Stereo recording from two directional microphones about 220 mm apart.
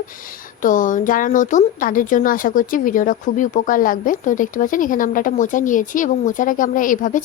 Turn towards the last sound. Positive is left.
turn(degrees=35)  # may be behind; listen again after turning